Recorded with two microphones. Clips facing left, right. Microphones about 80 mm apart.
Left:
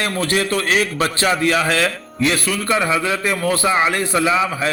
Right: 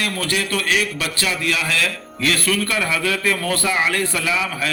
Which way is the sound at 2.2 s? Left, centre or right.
Left.